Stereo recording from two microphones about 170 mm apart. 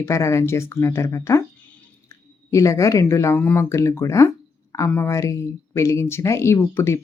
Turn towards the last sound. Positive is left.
turn(degrees=15)  # may be behind; listen again after turning